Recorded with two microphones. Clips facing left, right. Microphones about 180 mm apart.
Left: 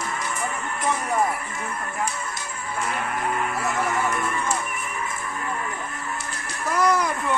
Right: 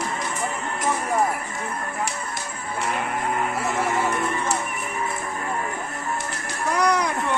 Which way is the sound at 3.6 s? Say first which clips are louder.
Right 1 dB; 25° right (ahead or behind).